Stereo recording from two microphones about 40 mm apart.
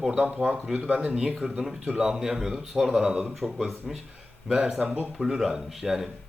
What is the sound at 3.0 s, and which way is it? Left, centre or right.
Speech, centre.